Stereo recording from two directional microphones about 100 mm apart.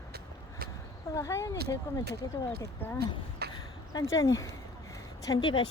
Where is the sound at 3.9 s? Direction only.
35° left (ahead or behind).